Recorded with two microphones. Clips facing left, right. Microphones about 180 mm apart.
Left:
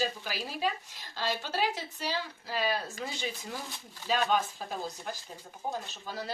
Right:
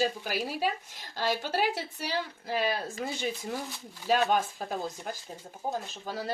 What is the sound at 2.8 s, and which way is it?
Speech, 30° right (ahead or behind).